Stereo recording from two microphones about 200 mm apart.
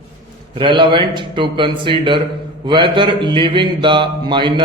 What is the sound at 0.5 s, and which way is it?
Speech, 25° right (ahead or behind).